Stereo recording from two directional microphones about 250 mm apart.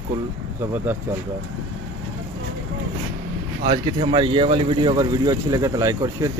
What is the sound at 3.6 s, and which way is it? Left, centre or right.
Speech, right.